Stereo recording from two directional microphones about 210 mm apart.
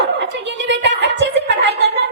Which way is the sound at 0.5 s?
55° right (ahead or behind).